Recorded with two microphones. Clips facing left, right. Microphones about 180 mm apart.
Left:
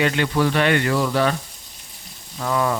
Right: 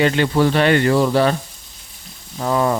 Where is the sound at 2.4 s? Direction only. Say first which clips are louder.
Right 4 dB; 35° right (ahead or behind).